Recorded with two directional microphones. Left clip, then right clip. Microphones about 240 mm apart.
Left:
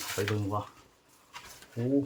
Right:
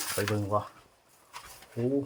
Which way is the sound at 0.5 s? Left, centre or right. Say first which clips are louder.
Right 5 dB; centre.